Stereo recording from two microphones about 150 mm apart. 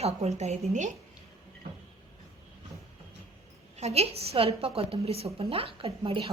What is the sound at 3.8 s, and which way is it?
A woman's voice, 45° right (ahead or behind).